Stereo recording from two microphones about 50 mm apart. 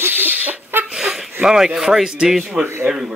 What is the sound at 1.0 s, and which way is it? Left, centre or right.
Speech, centre.